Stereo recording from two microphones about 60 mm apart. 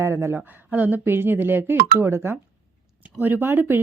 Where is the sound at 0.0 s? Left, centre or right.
Right.